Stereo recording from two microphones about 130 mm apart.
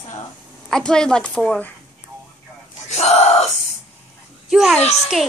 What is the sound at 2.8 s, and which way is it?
Speech, 60° left (ahead or behind).